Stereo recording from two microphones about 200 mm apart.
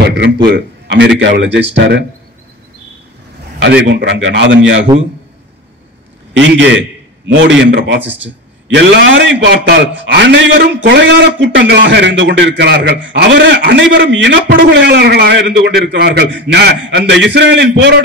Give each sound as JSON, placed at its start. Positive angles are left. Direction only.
{"t": 0.1, "sound": "speech", "side_deg": -60}
{"t": 3.6, "sound": "speech", "side_deg": -60}
{"t": 6.3, "sound": "speech", "side_deg": -65}